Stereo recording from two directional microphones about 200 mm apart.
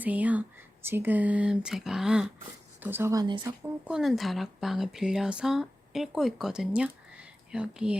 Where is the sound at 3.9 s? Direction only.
Centre (ahead or behind).